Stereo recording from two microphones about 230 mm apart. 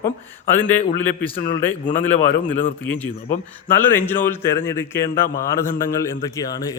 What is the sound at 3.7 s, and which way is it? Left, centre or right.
A man's voice, centre.